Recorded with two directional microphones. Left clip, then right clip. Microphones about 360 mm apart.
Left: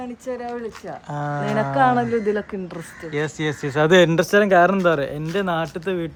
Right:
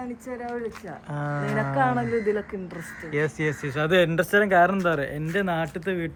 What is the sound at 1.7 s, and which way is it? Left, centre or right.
Speech, left.